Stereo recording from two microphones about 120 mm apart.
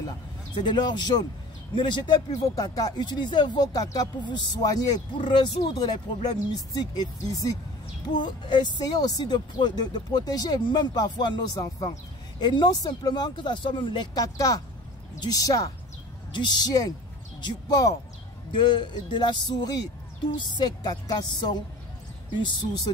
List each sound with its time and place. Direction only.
0.6 s speech: 40° left (ahead or behind)